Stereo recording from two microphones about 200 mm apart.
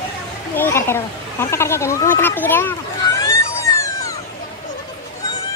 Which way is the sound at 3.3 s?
15° left (ahead or behind).